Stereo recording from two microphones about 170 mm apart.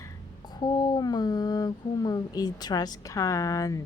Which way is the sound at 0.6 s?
25° left (ahead or behind).